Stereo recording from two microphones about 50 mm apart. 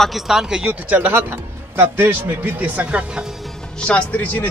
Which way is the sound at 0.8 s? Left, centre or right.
Right.